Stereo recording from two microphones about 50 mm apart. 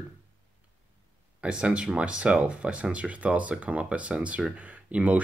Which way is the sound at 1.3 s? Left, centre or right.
Centre.